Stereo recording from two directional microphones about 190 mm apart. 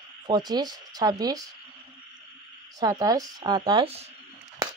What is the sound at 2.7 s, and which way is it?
Speech, 20° right (ahead or behind).